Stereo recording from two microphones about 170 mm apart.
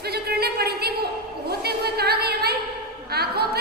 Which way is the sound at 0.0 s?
70° right (ahead or behind).